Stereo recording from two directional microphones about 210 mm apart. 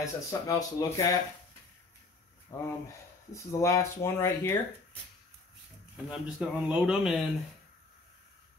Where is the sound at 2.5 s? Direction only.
15° left (ahead or behind).